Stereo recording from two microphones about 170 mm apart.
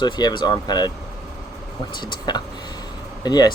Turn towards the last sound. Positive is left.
turn(degrees=25)  # may be behind; listen again after turning